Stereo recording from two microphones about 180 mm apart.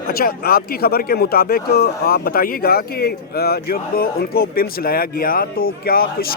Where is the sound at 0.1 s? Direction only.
55° left (ahead or behind).